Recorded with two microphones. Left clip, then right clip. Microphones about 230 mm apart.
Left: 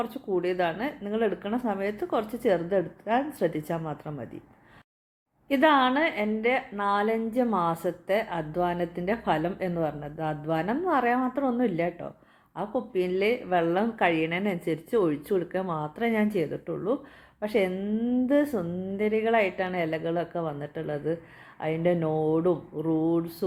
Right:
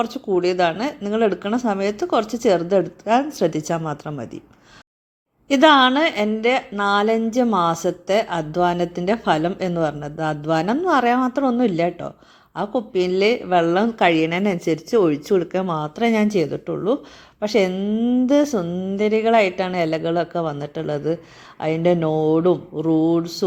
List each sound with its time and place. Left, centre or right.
0.0 s a woman's voice: right
5.5 s a woman's voice: right